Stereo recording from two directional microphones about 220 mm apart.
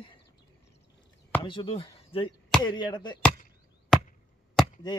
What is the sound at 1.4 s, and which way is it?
Speech, 25° left (ahead or behind).